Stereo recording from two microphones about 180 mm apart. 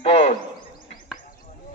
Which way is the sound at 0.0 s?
30° left (ahead or behind).